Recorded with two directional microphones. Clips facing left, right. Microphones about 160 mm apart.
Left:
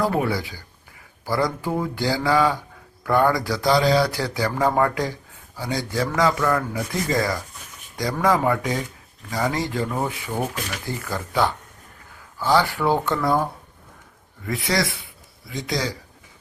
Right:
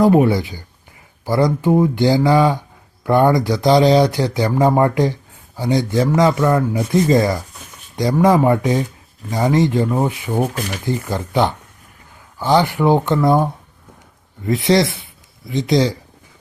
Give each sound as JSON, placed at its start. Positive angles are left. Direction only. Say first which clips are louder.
{"t": 0.0, "sound": "speech", "louder": "right 9 dB", "side_deg": -20}